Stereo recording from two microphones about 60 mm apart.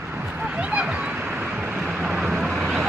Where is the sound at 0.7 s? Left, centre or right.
Centre.